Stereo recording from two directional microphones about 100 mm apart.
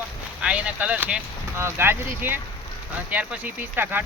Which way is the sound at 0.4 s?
10° right (ahead or behind).